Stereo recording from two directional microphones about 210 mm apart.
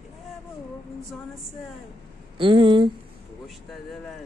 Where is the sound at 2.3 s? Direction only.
25° right (ahead or behind).